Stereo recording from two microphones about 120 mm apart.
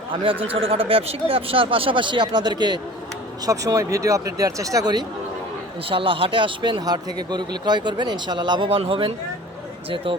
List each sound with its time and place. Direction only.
0.1 s speech: 50° right (ahead or behind); by 5.0 s 35° right (ahead or behind)
5.9 s speech: 45° right (ahead or behind)